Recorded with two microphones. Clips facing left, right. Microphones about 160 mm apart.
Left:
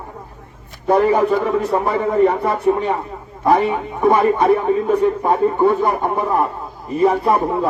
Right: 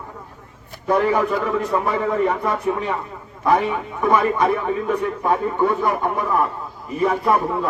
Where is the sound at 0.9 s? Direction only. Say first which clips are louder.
Left 4 dB; 40° left (ahead or behind).